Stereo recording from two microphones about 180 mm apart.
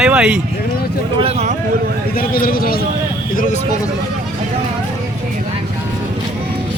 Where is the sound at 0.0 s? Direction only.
5° right (ahead or behind).